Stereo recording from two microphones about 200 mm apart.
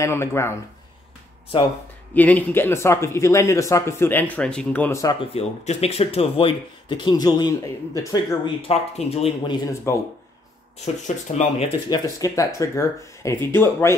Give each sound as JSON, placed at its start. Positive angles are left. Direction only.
{"t": 0.0, "sound": "speech", "side_deg": 15}
{"t": 2.1, "sound": "speech", "side_deg": 10}
{"t": 5.2, "sound": "speech", "side_deg": 30}
{"t": 8.6, "sound": "speech", "side_deg": 30}
{"t": 9.9, "sound": "speech", "side_deg": 15}
{"t": 11.1, "sound": "speech", "side_deg": 35}
{"t": 11.9, "sound": "speech", "side_deg": 20}